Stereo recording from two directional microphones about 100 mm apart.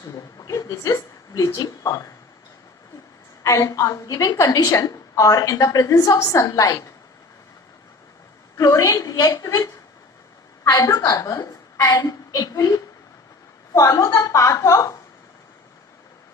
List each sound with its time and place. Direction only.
0.0 s a woman's voice: 35° left (ahead or behind)
3.4 s a woman's voice: 30° left (ahead or behind)
8.5 s a woman's voice: 35° left (ahead or behind)